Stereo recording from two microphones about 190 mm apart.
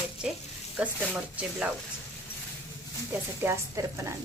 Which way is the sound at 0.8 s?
5° right (ahead or behind).